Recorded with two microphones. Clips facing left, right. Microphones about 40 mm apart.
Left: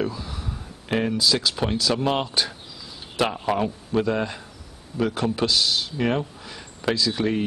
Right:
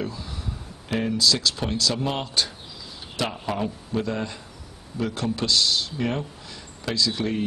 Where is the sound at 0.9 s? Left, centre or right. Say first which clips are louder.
Left 1 dB; centre.